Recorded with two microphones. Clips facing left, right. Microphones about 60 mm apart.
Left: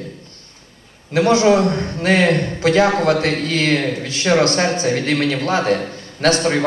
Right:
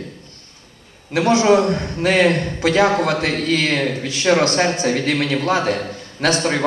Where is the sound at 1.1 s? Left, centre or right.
Right.